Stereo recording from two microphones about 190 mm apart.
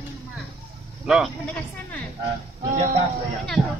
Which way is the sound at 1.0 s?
Centre (ahead or behind).